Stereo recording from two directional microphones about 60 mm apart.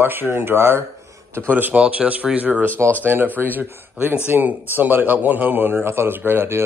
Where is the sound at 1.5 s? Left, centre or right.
Right.